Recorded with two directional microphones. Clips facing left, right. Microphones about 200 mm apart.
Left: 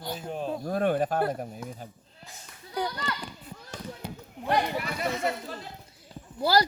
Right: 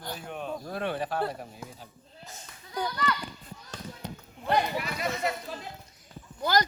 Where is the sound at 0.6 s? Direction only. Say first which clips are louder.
Left 9 dB; 45° left (ahead or behind).